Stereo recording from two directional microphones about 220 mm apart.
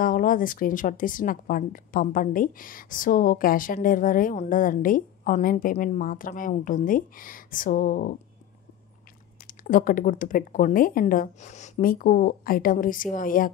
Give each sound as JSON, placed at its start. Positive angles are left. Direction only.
{"t": 0.0, "sound": "a woman's voice", "side_deg": 40}
{"t": 9.5, "sound": "a woman's voice", "side_deg": 40}